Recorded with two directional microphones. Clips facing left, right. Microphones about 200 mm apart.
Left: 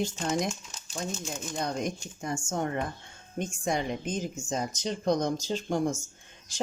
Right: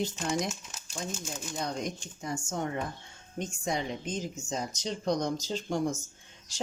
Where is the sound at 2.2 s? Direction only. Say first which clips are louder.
Left 2 dB; 50° left (ahead or behind).